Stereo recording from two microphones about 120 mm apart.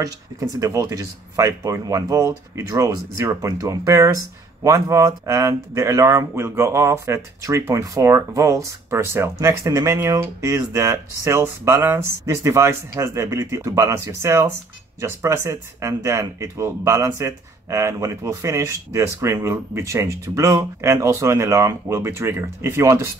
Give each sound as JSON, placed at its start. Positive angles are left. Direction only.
{"t": 0.0, "sound": "speech", "side_deg": -30}